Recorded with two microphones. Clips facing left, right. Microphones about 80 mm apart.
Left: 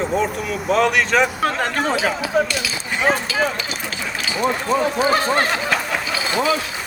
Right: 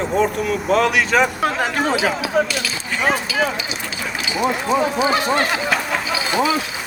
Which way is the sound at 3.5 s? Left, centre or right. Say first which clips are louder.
Even; left.